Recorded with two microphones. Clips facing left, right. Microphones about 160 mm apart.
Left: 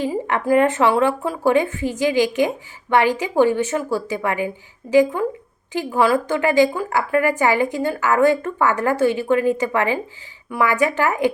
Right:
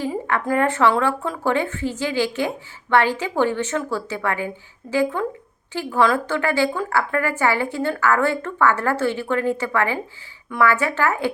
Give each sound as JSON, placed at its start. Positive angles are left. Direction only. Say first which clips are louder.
{"t": 0.0, "sound": "a woman's voice", "louder": "left 2 dB", "side_deg": 15}